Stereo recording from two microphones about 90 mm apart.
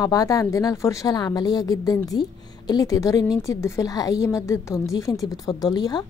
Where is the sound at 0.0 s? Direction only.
40° left (ahead or behind).